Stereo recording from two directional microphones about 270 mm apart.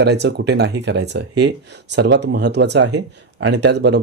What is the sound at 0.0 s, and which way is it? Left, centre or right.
Speech, right.